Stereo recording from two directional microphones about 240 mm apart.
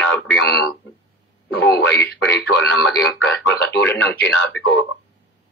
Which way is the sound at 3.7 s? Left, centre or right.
Centre.